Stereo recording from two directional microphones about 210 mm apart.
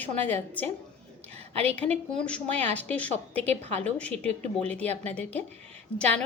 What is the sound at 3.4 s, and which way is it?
Speech, 30° right (ahead or behind).